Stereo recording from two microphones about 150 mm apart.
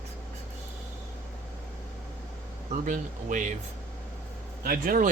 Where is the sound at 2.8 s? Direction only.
60° right (ahead or behind).